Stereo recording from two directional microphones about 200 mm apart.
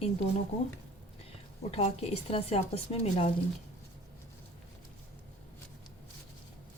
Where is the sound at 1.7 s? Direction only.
30° left (ahead or behind).